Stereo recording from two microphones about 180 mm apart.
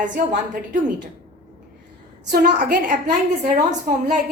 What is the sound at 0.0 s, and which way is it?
Speech, 45° right (ahead or behind).